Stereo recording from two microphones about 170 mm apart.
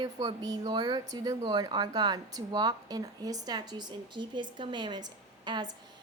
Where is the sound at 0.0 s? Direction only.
25° right (ahead or behind).